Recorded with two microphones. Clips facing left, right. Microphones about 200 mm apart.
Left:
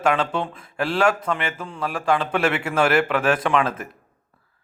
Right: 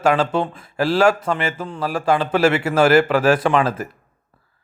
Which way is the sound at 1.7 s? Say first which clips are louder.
Right 3 dB; 30° right (ahead or behind).